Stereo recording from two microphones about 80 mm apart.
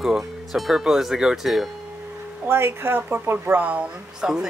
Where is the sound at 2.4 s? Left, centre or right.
Right; by 4.4 s centre.